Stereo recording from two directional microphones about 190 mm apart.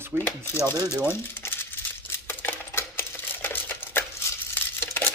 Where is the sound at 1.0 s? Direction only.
10° left (ahead or behind).